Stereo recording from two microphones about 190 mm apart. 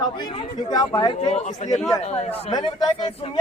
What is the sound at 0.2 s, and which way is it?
A man's voice, 25° left (ahead or behind).